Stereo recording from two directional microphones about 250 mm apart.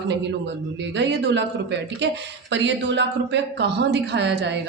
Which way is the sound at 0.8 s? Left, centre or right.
Right.